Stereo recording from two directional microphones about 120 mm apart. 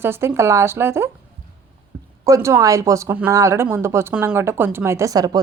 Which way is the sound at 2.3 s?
20° right (ahead or behind).